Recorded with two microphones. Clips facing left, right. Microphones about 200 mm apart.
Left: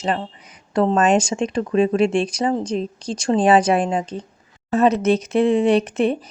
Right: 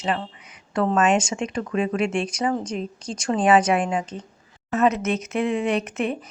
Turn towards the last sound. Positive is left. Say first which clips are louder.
# left 7 dB
turn(degrees=35)  # may be behind; listen again after turning